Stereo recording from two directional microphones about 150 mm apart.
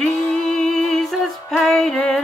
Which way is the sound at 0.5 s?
5° left (ahead or behind).